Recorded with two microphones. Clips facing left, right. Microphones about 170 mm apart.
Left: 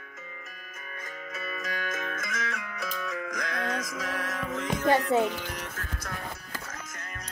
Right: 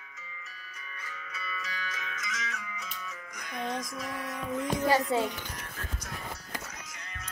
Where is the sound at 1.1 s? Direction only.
45° left (ahead or behind); by 6.1 s 90° left.